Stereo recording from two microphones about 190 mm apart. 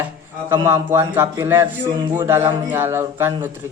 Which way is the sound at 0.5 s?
15° right (ahead or behind).